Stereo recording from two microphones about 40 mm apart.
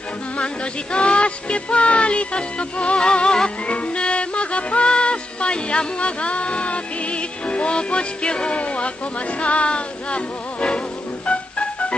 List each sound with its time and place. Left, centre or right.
0.9 s music: left